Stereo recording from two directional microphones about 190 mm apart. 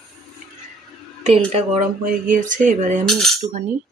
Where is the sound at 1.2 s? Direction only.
35° right (ahead or behind).